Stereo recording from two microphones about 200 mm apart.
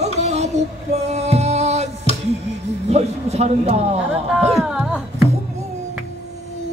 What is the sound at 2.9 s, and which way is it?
Speech, 35° right (ahead or behind).